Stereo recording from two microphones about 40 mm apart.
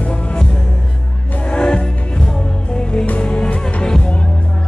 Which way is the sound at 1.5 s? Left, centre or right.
Left.